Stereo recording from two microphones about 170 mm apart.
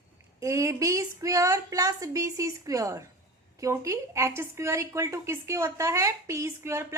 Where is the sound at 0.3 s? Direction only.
20° right (ahead or behind).